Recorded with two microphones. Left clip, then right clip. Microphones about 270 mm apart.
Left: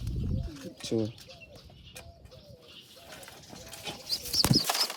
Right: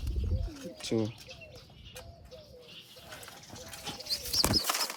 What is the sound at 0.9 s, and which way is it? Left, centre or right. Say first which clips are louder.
Speech: left 1 dB; centre.